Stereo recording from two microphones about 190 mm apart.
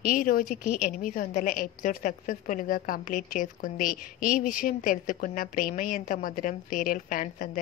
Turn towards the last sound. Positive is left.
turn(degrees=45)  # may be behind; listen again after turning